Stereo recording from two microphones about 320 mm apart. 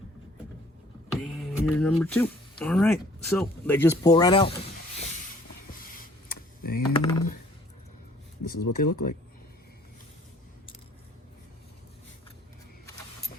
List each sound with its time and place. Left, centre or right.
1.1 s speech: centre
6.6 s typing: left
6.9 s typing: centre
8.4 s speech: left